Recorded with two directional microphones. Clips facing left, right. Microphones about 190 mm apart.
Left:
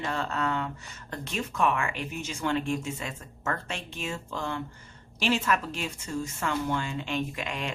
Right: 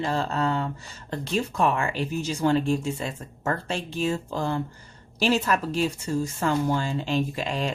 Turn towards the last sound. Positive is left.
turn(degrees=-35)  # may be behind; listen again after turning